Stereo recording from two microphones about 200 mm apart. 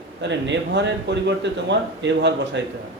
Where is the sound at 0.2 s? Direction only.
60° right (ahead or behind).